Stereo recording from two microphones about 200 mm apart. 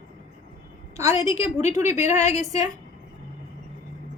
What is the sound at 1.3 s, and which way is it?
A woman's voice, 30° left (ahead or behind).